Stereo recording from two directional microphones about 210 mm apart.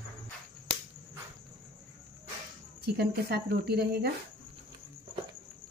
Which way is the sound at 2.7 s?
50° right (ahead or behind).